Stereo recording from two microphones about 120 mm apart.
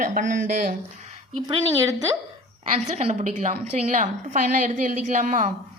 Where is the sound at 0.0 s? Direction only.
90° right.